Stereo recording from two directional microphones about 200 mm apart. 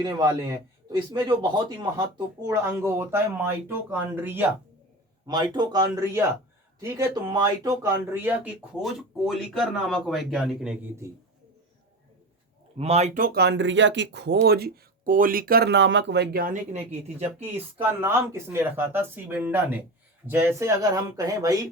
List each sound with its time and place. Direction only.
0.0 s speech: 20° right (ahead or behind)
1.4 s a man's voice: 20° right (ahead or behind)
5.2 s a man's voice: 20° right (ahead or behind); by 10.8 s 5° right (ahead or behind)
12.7 s speech: 30° right (ahead or behind); by 16.6 s 45° right (ahead or behind)
16.7 s speech: 30° right (ahead or behind)
17.7 s speech: 10° right (ahead or behind)